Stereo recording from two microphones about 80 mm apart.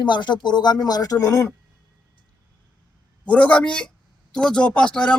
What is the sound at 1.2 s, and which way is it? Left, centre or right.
Speech, left.